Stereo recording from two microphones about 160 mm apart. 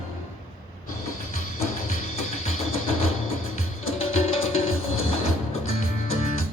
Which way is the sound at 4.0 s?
35° left (ahead or behind).